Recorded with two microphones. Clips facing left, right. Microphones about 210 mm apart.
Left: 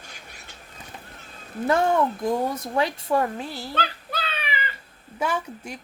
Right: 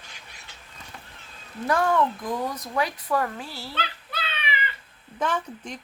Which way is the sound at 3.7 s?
45° left (ahead or behind).